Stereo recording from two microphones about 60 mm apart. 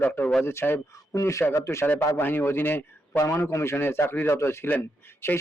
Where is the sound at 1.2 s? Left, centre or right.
Left.